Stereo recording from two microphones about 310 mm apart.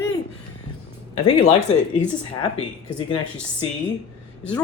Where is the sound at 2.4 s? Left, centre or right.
Centre.